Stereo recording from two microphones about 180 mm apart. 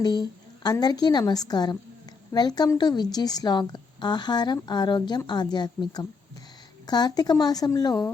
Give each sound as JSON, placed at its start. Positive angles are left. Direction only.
{"t": 0.0, "sound": "a woman's voice", "side_deg": 25}